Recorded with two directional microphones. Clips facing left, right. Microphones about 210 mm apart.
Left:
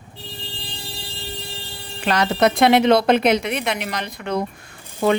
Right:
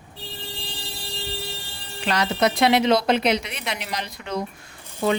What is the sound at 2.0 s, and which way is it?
Speech, 50° left (ahead or behind).